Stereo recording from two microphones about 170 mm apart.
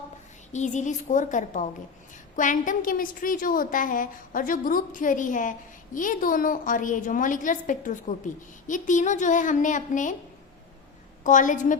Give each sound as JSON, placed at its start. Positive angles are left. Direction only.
{"t": 0.5, "sound": "a woman's voice", "side_deg": 45}
{"t": 11.2, "sound": "a woman's voice", "side_deg": 50}